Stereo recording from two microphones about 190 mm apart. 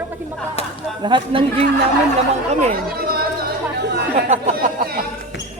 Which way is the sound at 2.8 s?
55° right (ahead or behind).